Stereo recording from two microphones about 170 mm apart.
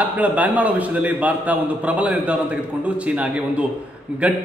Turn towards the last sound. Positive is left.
turn(degrees=-5)  # may be behind; listen again after turning